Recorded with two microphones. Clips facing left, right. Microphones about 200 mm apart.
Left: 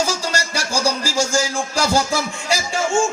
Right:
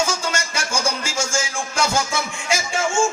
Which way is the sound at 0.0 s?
35° left (ahead or behind).